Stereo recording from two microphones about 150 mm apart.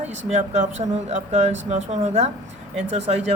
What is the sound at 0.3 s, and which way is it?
Speech, 50° right (ahead or behind).